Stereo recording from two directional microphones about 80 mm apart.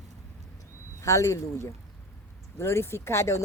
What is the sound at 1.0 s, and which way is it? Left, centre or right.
Speech, left.